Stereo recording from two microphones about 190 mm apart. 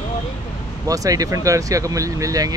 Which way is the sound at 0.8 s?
20° right (ahead or behind).